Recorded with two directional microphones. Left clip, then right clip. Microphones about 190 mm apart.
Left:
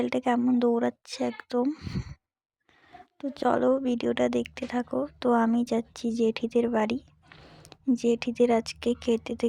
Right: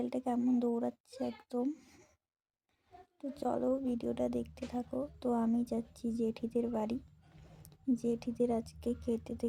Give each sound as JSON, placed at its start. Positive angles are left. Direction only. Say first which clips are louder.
{"t": 0.0, "sound": "a woman's voice", "louder": "left 9 dB", "side_deg": 25}
{"t": 3.2, "sound": "a woman's voice", "louder": "left 10 dB", "side_deg": 25}